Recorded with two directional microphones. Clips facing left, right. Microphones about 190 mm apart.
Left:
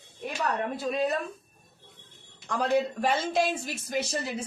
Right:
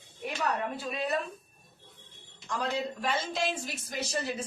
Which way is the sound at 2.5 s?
55° left (ahead or behind).